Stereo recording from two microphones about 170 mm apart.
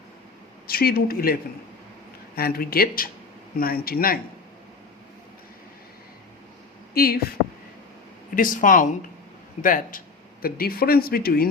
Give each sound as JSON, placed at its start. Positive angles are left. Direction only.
{"t": 0.7, "sound": "speech", "side_deg": 65}
{"t": 6.9, "sound": "speech", "side_deg": 65}
{"t": 8.4, "sound": "speech", "side_deg": 55}